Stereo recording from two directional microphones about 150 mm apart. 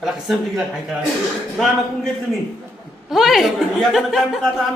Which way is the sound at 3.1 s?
Centre (ahead or behind).